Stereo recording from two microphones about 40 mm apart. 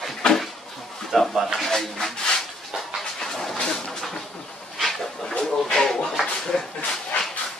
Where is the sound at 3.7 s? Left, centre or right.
Centre.